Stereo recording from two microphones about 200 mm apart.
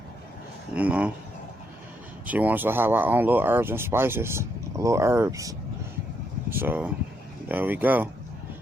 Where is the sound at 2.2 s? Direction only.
10° right (ahead or behind).